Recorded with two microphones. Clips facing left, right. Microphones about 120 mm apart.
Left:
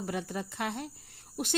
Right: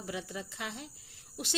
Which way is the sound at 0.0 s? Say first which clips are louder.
Left 5 dB; 50° left (ahead or behind).